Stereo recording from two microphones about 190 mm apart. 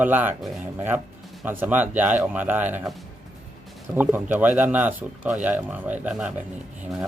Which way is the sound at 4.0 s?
10° right (ahead or behind).